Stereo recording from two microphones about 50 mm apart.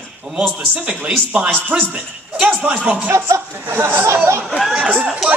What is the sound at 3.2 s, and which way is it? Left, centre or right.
Speech, right.